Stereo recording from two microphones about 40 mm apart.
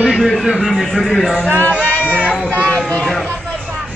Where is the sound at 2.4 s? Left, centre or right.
Left.